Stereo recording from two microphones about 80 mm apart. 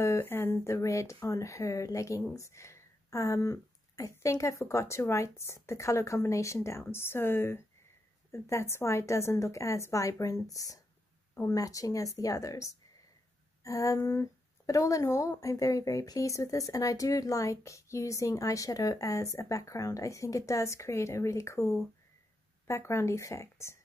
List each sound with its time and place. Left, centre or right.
0.0 s speech: left
13.9 s speech: left